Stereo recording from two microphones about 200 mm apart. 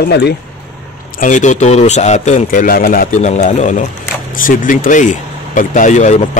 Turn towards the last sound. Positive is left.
turn(degrees=35)  # may be behind; listen again after turning